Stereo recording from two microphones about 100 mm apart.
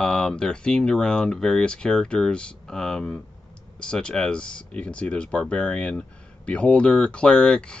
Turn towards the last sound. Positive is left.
turn(degrees=10)  # may be behind; listen again after turning